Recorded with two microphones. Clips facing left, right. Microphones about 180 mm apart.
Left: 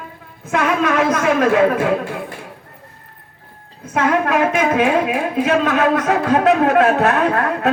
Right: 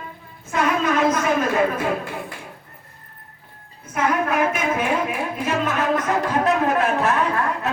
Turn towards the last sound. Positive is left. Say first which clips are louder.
# left 5 dB
turn(degrees=70)  # may be behind; listen again after turning